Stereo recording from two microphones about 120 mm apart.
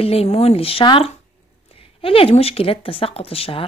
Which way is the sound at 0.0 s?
55° left (ahead or behind).